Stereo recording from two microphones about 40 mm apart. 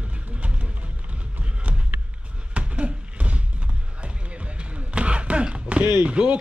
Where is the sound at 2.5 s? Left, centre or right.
Right.